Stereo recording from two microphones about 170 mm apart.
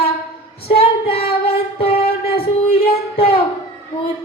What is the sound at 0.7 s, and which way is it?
Female singing, 65° left (ahead or behind).